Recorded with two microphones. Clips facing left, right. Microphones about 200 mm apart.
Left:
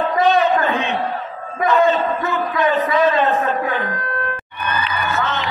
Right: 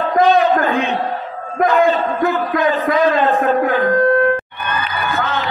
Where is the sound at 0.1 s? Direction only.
50° right (ahead or behind).